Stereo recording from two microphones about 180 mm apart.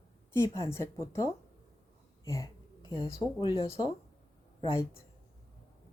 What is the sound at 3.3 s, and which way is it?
Speech, 30° left (ahead or behind).